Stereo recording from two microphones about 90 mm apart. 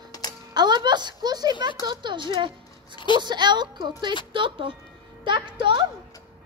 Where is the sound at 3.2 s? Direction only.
55° right (ahead or behind).